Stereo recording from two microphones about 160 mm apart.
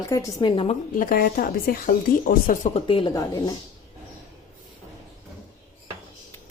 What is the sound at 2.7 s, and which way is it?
Speech, 35° left (ahead or behind).